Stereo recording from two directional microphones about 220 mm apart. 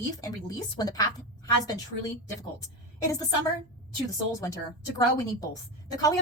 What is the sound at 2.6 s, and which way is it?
Speech, 15° left (ahead or behind).